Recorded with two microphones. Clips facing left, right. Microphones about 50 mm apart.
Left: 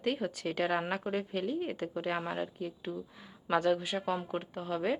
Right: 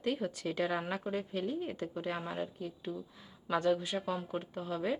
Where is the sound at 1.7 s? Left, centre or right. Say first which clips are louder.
Left 3 dB; left.